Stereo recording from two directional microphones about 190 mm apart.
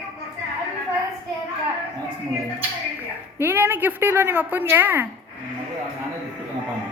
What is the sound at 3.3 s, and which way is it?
A woman's voice, 10° right (ahead or behind).